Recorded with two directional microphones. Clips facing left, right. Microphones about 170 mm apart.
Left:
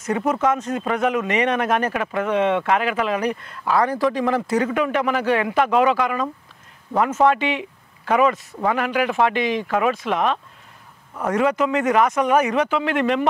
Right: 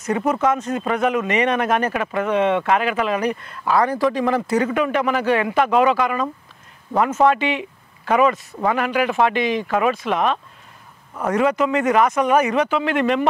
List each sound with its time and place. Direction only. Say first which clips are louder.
0.2 s speech: right 1 dB; 20° right (ahead or behind)